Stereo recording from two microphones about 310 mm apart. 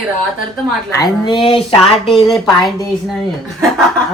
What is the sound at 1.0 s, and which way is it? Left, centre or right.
Speech, centre.